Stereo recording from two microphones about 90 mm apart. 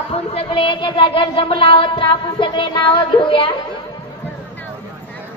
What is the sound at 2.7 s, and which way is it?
Music, 65° left (ahead or behind).